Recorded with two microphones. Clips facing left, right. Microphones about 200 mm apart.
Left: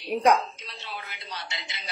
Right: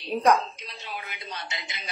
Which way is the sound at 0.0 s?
15° left (ahead or behind).